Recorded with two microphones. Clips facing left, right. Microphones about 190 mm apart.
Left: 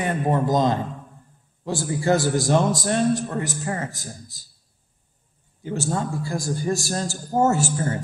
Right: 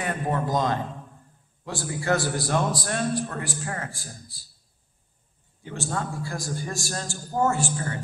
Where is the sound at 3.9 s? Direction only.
45° left (ahead or behind).